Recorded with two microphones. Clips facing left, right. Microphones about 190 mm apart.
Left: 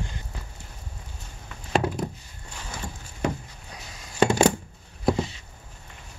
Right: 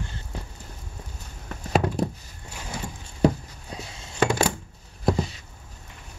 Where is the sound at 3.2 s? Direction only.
35° right (ahead or behind).